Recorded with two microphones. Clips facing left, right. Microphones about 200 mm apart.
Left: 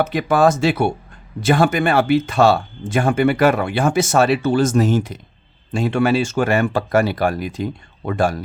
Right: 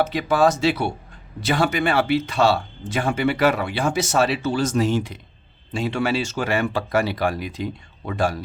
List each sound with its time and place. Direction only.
0.0 s speech: 55° left (ahead or behind)